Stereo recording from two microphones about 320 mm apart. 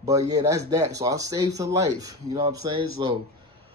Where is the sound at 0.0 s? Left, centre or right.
Centre.